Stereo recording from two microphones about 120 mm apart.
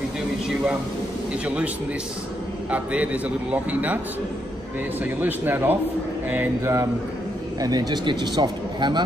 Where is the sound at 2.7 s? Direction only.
10° right (ahead or behind).